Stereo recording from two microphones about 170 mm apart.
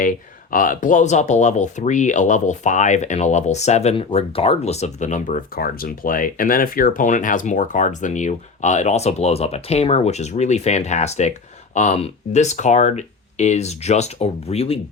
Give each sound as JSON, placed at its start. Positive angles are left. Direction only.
{"t": 0.5, "sound": "speech", "side_deg": 50}